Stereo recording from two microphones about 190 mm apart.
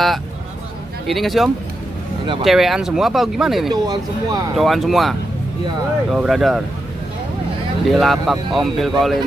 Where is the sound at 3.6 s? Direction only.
20° right (ahead or behind).